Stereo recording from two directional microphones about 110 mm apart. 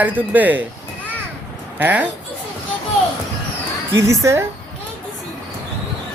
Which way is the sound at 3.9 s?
25° right (ahead or behind).